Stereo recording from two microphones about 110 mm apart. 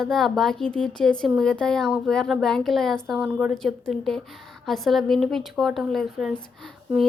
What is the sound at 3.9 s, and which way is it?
Speech, 75° right (ahead or behind).